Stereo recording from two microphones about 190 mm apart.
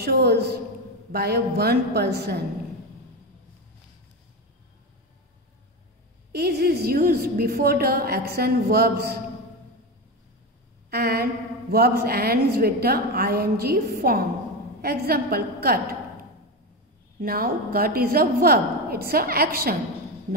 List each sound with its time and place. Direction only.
0.0 s a woman's voice: 55° right (ahead or behind)
6.3 s a woman's voice: 55° right (ahead or behind)
10.9 s a sound: 55° right (ahead or behind)
11.7 s a woman's voice: 55° right (ahead or behind)